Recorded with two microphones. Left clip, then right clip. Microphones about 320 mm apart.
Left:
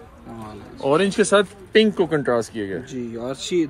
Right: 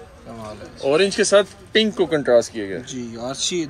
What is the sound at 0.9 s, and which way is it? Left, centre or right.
Speech, centre.